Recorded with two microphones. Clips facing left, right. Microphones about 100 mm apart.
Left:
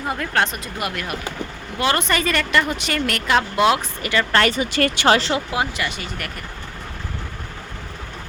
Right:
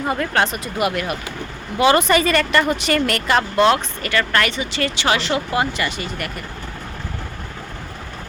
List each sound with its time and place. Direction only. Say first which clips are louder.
0.1 s speech: right 1 dB; centre (ahead or behind); by 4.4 s 20° left (ahead or behind)
4.4 s speech: left 2 dB; 40° left (ahead or behind)
5.5 s speech: right 3 dB; 5° left (ahead or behind)